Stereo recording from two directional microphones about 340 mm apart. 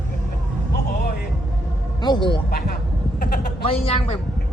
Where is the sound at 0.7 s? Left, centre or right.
Left.